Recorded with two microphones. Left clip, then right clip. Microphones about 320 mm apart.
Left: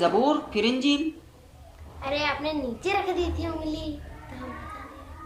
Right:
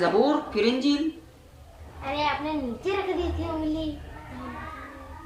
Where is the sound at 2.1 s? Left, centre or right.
Left.